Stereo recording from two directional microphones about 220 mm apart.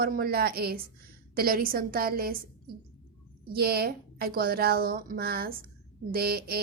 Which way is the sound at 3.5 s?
45° right (ahead or behind).